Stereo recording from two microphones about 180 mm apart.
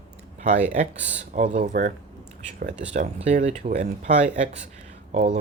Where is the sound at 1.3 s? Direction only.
40° right (ahead or behind).